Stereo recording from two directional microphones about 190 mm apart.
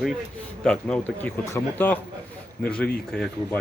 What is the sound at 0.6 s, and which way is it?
Speech, 5° left (ahead or behind).